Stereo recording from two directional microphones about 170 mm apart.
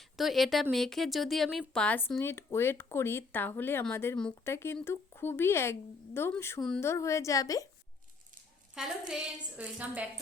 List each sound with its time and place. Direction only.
0.0 s speech: centre (ahead or behind); by 7.7 s 20° left (ahead or behind)
8.7 s a woman's voice: 5° right (ahead or behind)